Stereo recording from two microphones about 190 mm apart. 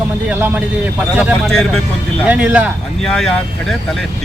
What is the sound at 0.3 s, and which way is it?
Speech, 10° right (ahead or behind).